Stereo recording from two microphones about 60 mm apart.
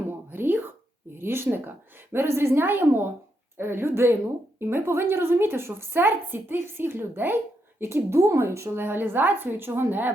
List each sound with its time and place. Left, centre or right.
0.1 s whispering: right
1.2 s a woman's voice: right
2.1 s speech: right
2.6 s a woman's voice: right
8.8 s a woman's voice: right